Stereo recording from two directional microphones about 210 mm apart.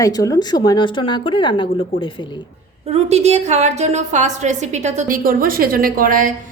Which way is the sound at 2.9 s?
30° right (ahead or behind).